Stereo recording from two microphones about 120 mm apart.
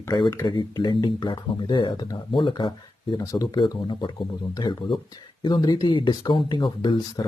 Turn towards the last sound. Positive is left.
turn(degrees=40)  # may be behind; listen again after turning